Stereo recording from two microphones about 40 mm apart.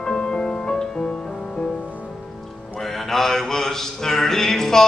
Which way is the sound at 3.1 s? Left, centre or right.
Centre.